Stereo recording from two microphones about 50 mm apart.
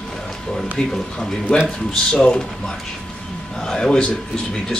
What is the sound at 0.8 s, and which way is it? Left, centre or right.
Speech, centre.